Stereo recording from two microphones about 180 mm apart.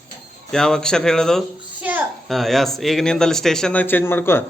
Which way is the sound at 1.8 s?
10° right (ahead or behind).